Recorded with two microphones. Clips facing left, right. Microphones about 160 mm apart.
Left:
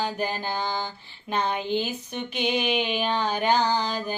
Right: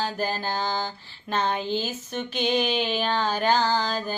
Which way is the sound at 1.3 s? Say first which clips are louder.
Even; 15° left (ahead or behind).